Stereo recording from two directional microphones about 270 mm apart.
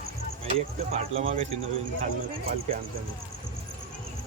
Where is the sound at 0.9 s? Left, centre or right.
Right.